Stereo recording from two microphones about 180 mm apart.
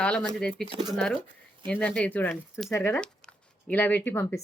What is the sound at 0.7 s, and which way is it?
Speech, 25° right (ahead or behind).